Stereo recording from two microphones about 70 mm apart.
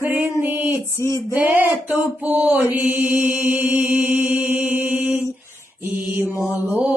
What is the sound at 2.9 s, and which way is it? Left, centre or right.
Mantra, right.